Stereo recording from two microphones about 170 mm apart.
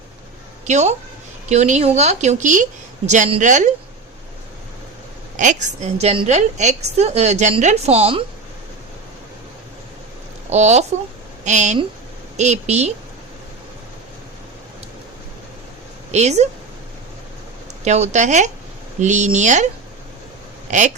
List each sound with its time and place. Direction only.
0.6 s a woman's voice: 45° right (ahead or behind)
5.4 s a woman's voice: 45° right (ahead or behind)
10.5 s a woman's voice: 40° right (ahead or behind)
16.1 s a woman's voice: 40° right (ahead or behind)
17.8 s speech: 40° right (ahead or behind)